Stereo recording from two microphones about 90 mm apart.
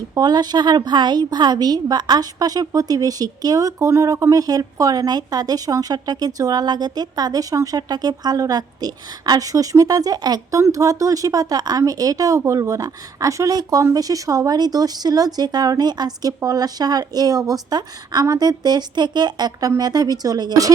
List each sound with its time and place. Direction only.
0.1 s a woman's voice: 50° right (ahead or behind)